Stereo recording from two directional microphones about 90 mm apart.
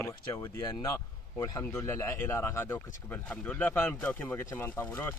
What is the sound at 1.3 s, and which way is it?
Speech, 45° left (ahead or behind).